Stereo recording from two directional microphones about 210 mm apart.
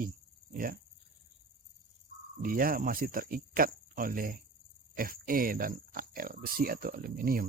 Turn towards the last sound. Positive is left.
turn(degrees=-45)  # may be behind; listen again after turning